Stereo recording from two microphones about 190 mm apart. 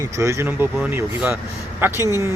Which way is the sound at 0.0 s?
15° right (ahead or behind).